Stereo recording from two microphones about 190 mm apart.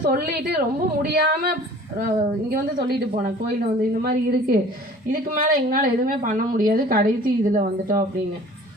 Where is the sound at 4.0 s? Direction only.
55° right (ahead or behind).